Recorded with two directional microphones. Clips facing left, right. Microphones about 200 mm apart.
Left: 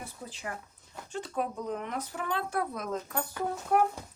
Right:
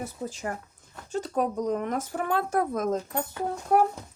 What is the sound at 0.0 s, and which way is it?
Speech, 45° right (ahead or behind).